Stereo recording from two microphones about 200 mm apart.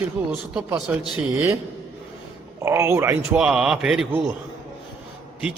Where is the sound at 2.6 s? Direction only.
15° right (ahead or behind).